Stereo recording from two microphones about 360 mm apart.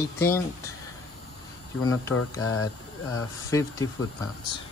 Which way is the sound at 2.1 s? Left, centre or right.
Left.